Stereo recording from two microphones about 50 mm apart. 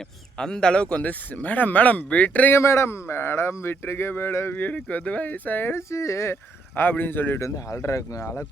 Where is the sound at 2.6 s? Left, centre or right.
Left.